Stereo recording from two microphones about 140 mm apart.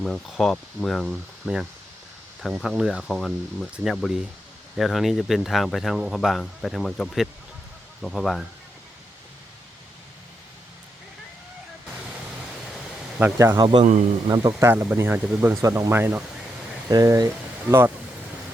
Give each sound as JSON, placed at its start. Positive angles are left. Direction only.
{"t": 0.0, "sound": "speech", "side_deg": 5}
{"t": 13.1, "sound": "speech", "side_deg": -15}
{"t": 13.6, "sound": "a man's voice", "side_deg": -35}
{"t": 14.7, "sound": "speech", "side_deg": -15}
{"t": 16.9, "sound": "speech", "side_deg": -25}